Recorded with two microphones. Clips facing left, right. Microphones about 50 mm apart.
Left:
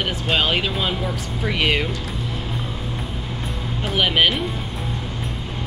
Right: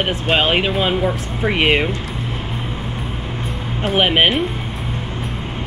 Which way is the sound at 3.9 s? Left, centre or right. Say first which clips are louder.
Right 4 dB; right.